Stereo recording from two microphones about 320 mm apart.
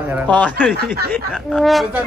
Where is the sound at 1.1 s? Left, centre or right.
Centre.